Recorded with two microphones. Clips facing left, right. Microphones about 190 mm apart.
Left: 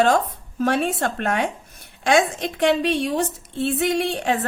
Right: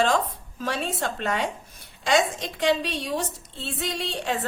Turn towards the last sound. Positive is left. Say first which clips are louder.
# left 8 dB
turn(degrees=55)  # may be behind; listen again after turning